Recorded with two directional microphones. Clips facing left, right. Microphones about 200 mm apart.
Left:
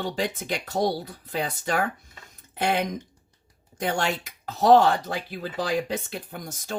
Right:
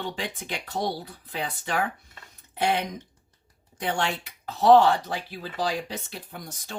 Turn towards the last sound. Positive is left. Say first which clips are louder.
# left 4 dB
turn(degrees=45)  # may be behind; listen again after turning